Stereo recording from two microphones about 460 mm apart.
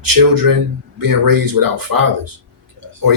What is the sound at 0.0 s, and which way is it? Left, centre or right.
A man's voice, right.